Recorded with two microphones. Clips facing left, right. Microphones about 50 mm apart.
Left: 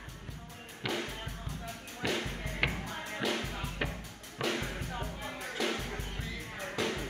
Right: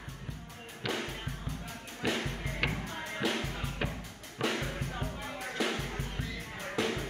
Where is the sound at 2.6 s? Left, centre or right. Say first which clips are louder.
Left 1 dB; centre.